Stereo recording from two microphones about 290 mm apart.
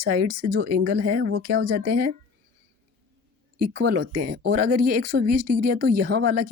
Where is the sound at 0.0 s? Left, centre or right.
Right.